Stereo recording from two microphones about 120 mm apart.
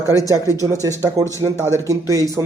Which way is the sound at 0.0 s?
30° left (ahead or behind).